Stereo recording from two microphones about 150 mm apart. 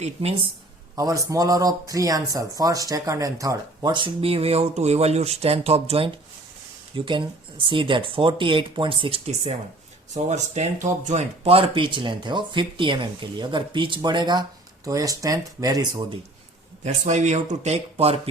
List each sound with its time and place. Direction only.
0.0 s speech: 45° right (ahead or behind)
0.9 s speech: 20° right (ahead or behind)
3.9 s speech: 35° right (ahead or behind)
16.8 s speech: 50° right (ahead or behind)